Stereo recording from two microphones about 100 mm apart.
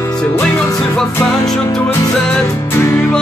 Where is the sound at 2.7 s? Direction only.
25° left (ahead or behind).